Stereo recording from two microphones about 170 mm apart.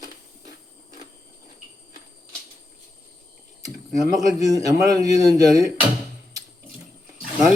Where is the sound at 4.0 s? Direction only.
20° right (ahead or behind).